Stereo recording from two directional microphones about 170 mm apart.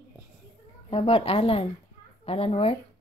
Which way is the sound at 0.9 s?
35° left (ahead or behind).